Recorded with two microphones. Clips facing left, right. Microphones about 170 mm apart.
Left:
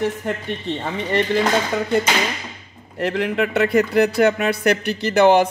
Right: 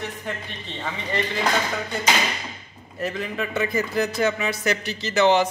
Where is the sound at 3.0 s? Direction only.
75° left (ahead or behind).